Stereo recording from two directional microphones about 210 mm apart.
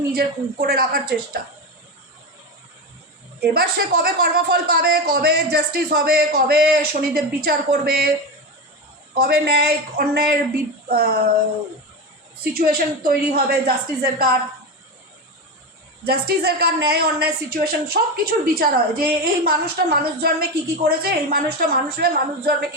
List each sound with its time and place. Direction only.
0.1 s speech: 50° right (ahead or behind)
3.4 s speech: 50° right (ahead or behind)
9.1 s speech: 50° right (ahead or behind)
12.4 s speech: 45° right (ahead or behind)
16.0 s speech: 50° right (ahead or behind)